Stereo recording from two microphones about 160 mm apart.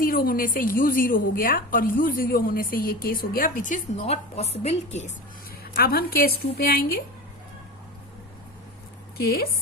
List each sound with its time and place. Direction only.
0.0 s a woman's voice: 65° left (ahead or behind); by 5.1 s 45° left (ahead or behind)
5.7 s a woman's voice: 70° left (ahead or behind)
9.1 s a woman's voice: 75° left (ahead or behind)